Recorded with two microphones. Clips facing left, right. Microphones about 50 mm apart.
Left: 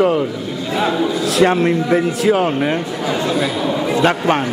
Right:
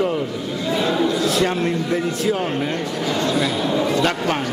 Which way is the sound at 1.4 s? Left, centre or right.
Centre.